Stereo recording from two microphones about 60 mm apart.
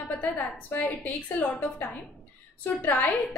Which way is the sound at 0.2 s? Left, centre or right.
Left.